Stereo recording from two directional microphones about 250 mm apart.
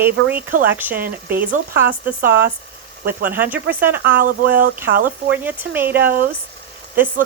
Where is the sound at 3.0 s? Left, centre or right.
Right.